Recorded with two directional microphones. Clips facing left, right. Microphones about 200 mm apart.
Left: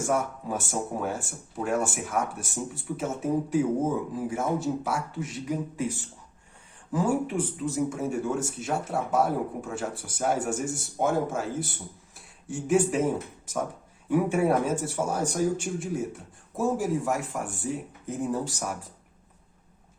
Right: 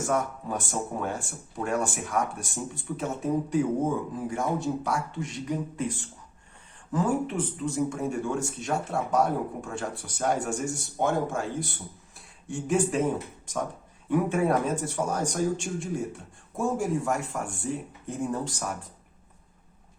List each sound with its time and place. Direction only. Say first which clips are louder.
0.0 s speech: even; 5° left (ahead or behind)